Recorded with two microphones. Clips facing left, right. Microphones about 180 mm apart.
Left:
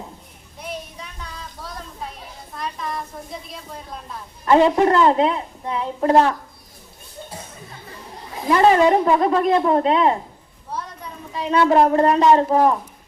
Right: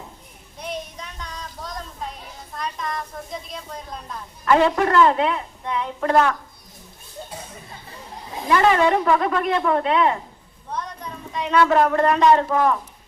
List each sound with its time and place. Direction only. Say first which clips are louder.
0.6 s child singing: right 1 dB; 5° left (ahead or behind)
2.6 s a woman's voice: even; 5° left (ahead or behind)
4.4 s a woman's voice: left 3 dB; 25° left (ahead or behind)
8.4 s a woman's voice: left 3 dB; 30° left (ahead or behind)
10.7 s a sound: right 1 dB; 5° left (ahead or behind)
11.3 s a woman's voice: left 2 dB; 30° left (ahead or behind)